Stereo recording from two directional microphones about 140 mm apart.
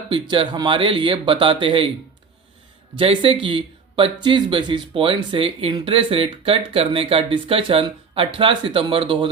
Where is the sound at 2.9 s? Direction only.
40° right (ahead or behind).